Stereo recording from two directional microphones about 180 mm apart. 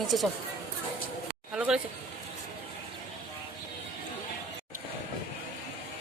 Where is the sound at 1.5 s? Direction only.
5° right (ahead or behind).